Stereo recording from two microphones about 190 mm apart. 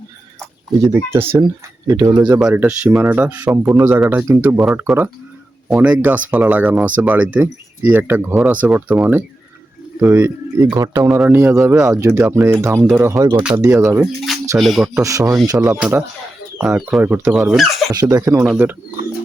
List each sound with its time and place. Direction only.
0.7 s speech: 15° right (ahead or behind)
11.1 s speech: centre (ahead or behind)
14.6 s speech: centre (ahead or behind)
15.0 s speech: 15° right (ahead or behind); by 17.9 s centre (ahead or behind)
17.9 s speech: 15° right (ahead or behind)